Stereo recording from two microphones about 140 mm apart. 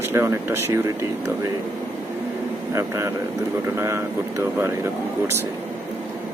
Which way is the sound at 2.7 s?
20° right (ahead or behind).